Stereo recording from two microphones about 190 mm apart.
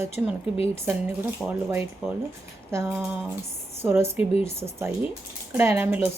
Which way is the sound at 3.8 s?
10° right (ahead or behind).